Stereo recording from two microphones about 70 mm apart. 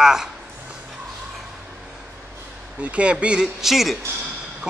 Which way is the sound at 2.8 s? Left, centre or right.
Centre.